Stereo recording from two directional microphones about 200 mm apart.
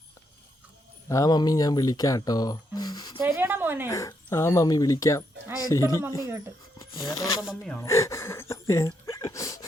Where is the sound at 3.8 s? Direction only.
15° left (ahead or behind).